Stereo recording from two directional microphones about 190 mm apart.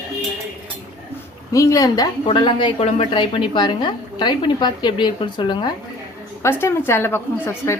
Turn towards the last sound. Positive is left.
turn(degrees=10)  # may be behind; listen again after turning